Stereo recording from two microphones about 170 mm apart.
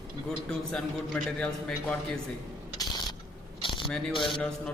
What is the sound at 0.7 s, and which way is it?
A man's voice, 5° left (ahead or behind).